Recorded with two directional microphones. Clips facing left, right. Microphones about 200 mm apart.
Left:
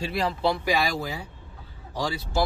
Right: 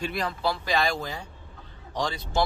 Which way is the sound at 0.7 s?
10° left (ahead or behind).